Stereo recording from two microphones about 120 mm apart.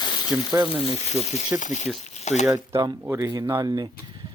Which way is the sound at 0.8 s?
65° left (ahead or behind).